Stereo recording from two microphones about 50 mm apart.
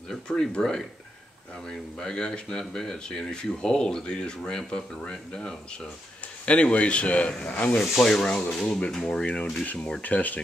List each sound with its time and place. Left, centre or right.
0.1 s speech: centre
7.9 s speech: centre
9.0 s speech: left